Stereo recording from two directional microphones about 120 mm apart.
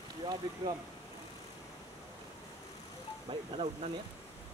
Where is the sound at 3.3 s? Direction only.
40° right (ahead or behind).